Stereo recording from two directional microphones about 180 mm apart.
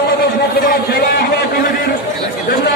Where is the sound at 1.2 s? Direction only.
55° left (ahead or behind).